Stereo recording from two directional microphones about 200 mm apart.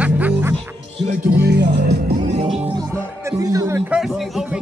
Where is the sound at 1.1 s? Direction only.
55° right (ahead or behind).